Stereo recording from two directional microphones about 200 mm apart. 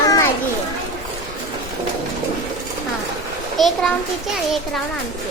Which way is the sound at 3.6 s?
Centre (ahead or behind).